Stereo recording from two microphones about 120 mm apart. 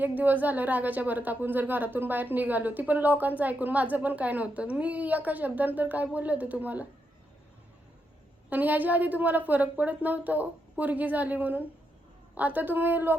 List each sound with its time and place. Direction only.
0.0 s a woman's voice: 15° right (ahead or behind)
8.4 s a woman's voice: 15° right (ahead or behind)